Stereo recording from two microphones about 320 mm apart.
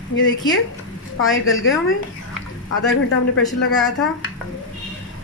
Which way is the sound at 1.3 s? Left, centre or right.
Left.